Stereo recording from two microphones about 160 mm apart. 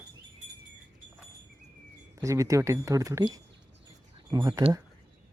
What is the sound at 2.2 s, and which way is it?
Speech, 20° right (ahead or behind).